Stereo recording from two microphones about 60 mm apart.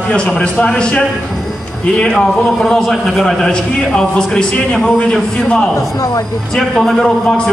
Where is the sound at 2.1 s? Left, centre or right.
Centre.